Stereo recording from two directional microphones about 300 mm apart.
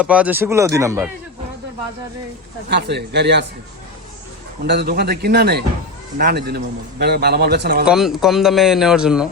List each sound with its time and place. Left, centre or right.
0.0 s speech: centre
2.6 s speech: right
4.6 s speech: right
7.9 s speech: centre